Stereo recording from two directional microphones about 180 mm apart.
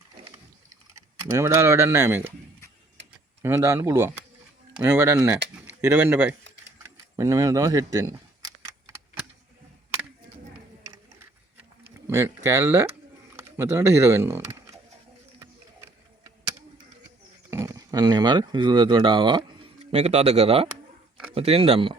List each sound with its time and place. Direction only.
0.9 s speech: 15° right (ahead or behind)
3.4 s speech: 15° right (ahead or behind)
12.0 s speech: 15° right (ahead or behind)
17.5 s speech: 15° right (ahead or behind)
19.8 s speech: 35° right (ahead or behind)